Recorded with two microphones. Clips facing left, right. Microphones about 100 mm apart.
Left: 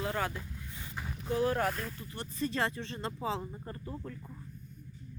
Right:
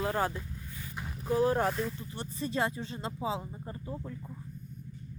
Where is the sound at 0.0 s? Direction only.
30° right (ahead or behind).